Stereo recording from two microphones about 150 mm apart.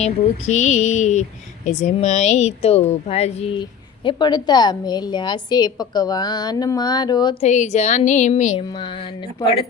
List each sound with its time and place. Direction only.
0.0 s a woman's voice: 50° left (ahead or behind); by 7.3 s 30° left (ahead or behind)
7.4 s speech: 50° left (ahead or behind)
9.4 s speech: 35° left (ahead or behind)